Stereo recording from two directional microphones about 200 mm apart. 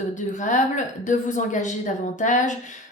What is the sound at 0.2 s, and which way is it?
A woman's voice, 40° left (ahead or behind).